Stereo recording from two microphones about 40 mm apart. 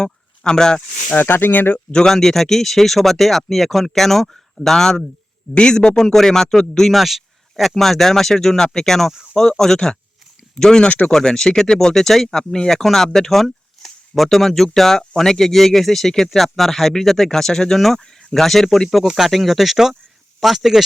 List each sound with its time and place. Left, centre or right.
0.0 s a sound: centre
1.1 s speech: left
1.9 s speech: centre
2.1 s speech: centre
5.5 s speech: left
6.9 s speech: centre
10.8 s speech: left
11.1 s speech: centre
19.0 s speech: centre